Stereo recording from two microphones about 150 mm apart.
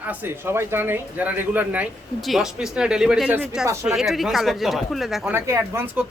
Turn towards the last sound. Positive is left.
turn(degrees=-15)  # may be behind; listen again after turning